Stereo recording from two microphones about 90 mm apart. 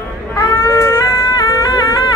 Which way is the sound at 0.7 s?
30° left (ahead or behind).